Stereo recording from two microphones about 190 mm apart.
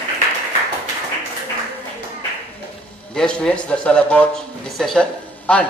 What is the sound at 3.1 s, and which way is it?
A man's voice, 5° left (ahead or behind).